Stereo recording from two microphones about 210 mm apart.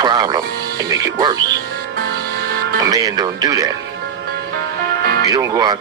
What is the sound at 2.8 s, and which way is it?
Speech, 15° right (ahead or behind).